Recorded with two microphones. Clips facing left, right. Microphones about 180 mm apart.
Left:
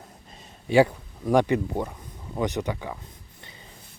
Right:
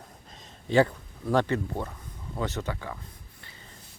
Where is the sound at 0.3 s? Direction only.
10° left (ahead or behind).